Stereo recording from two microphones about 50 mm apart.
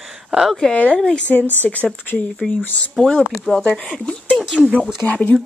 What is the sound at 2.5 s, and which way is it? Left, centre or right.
Speech, left.